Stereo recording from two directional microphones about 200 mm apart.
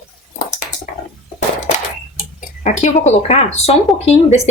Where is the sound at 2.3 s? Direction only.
40° left (ahead or behind).